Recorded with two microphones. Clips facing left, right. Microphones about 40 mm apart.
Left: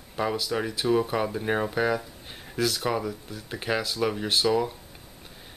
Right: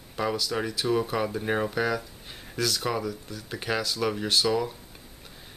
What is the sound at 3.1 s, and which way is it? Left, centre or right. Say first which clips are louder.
Speech: even; left.